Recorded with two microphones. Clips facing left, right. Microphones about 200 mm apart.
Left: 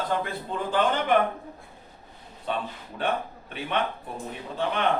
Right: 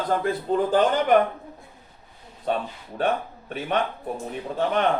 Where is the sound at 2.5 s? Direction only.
45° right (ahead or behind).